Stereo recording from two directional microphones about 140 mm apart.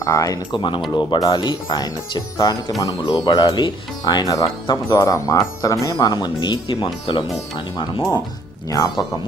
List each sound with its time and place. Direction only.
0.0 s speech: 25° left (ahead or behind)
8.7 s speech: 25° left (ahead or behind)